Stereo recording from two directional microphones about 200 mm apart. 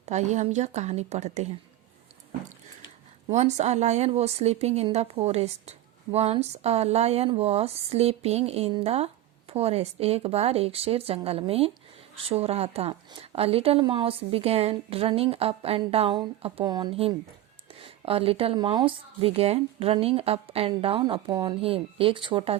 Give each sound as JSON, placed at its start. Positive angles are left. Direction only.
{"t": 0.0, "sound": "a woman's voice", "side_deg": -35}
{"t": 3.3, "sound": "a woman's voice", "side_deg": -35}